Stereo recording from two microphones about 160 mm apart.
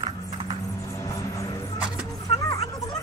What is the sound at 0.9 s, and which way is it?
Vehicle, 20° left (ahead or behind).